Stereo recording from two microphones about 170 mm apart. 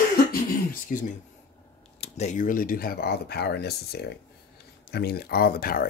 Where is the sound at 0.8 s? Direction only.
50° left (ahead or behind).